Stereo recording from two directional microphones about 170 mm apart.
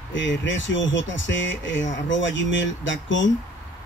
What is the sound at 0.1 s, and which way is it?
Speech, 90° left.